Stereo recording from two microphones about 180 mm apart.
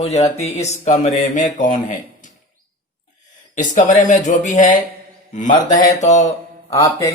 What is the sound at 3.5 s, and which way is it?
Speech, 45° left (ahead or behind).